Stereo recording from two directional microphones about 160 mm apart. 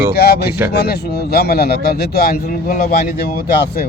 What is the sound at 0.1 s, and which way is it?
A man's voice, 85° left.